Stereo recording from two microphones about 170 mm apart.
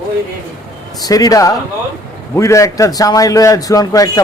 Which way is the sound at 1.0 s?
20° left (ahead or behind).